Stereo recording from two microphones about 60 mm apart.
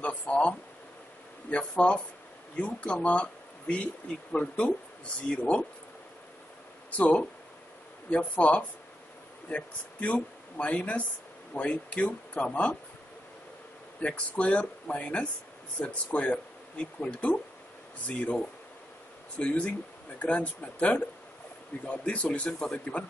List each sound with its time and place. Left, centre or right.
0.0 s speech: left
6.9 s speech: left
13.9 s speech: centre